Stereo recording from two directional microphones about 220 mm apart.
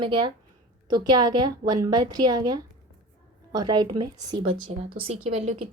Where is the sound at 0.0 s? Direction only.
20° right (ahead or behind).